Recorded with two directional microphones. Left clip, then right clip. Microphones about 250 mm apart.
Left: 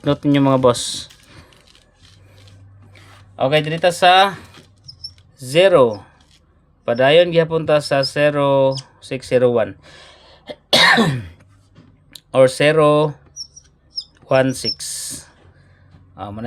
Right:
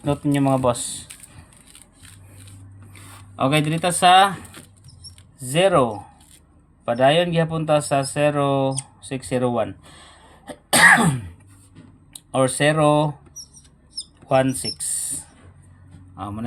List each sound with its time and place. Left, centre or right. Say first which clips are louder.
0.0 s speech: left 5 dB; left
2.9 s speech: left 1 dB; centre
5.4 s speech: left 6 dB; left
10.8 s cough: even; left
12.1 s speech: left 8 dB; left
14.3 s speech: left 3 dB; left
16.1 s a man's voice: left 2 dB; centre